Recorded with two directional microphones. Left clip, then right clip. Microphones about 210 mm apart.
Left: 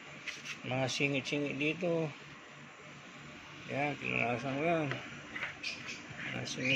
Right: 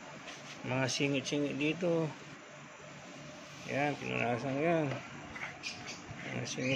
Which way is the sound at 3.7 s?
10° right (ahead or behind).